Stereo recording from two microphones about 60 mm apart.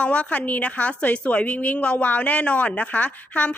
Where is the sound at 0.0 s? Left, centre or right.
Left.